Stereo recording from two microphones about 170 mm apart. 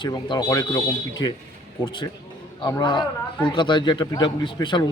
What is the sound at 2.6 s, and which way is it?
A man's voice, 25° left (ahead or behind).